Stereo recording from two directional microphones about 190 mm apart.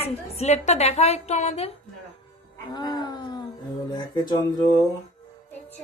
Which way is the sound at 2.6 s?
20° left (ahead or behind).